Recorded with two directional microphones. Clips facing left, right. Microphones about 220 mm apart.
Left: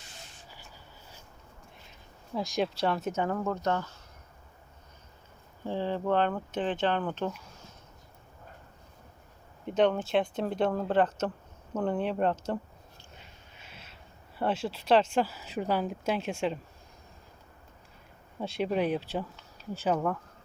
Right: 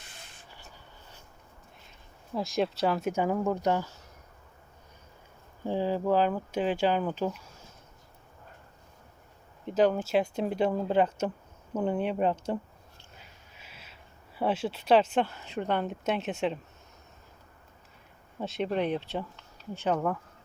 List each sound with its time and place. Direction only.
0.0 s spray: 55° right (ahead or behind)
2.3 s speech: centre (ahead or behind)
5.6 s speech: 10° right (ahead or behind)
9.6 s speech: 5° right (ahead or behind)
13.7 s speech: 5° right (ahead or behind)
18.3 s speech: centre (ahead or behind)